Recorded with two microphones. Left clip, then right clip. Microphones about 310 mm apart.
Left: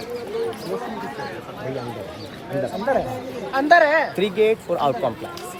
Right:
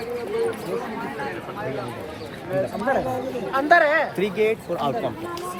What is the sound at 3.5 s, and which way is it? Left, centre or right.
Speech, left.